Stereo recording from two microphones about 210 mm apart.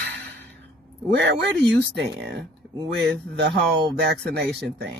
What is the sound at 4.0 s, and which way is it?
Speech, 55° right (ahead or behind).